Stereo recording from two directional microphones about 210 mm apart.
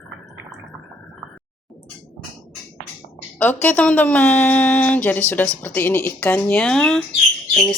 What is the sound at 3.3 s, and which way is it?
A woman's voice, 10° left (ahead or behind).